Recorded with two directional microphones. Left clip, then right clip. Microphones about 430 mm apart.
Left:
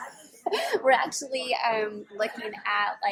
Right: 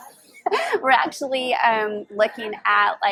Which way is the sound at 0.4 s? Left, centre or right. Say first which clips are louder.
Right 4 dB; right.